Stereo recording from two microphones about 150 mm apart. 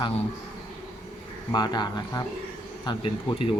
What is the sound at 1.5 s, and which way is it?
Speech, 30° left (ahead or behind).